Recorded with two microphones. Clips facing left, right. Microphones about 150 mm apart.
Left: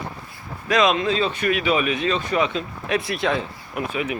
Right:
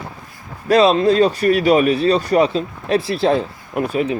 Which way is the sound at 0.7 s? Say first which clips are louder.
Right 7 dB; 35° right (ahead or behind).